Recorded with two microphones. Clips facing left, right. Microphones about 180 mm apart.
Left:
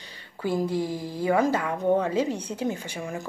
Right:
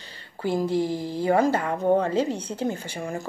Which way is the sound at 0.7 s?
10° left (ahead or behind).